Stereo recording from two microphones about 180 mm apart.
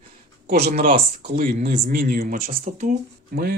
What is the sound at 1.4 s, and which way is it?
Speech, 55° right (ahead or behind).